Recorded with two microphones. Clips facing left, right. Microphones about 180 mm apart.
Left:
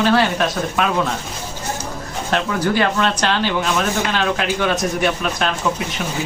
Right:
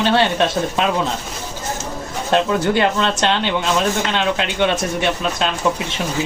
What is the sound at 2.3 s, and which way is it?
A man's voice, 25° right (ahead or behind).